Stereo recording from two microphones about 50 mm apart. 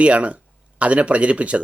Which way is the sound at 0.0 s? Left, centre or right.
Right.